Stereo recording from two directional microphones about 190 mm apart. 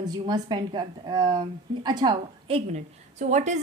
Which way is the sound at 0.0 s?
20° right (ahead or behind).